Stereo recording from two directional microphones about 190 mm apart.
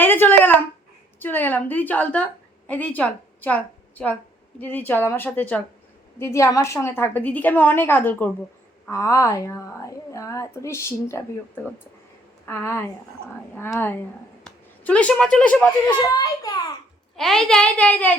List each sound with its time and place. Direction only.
0.0 s a sound: 10° left (ahead or behind)
1.2 s a woman's voice: 10° left (ahead or behind)
16.0 s a child's voice: 20° left (ahead or behind)
17.2 s a woman's voice: centre (ahead or behind)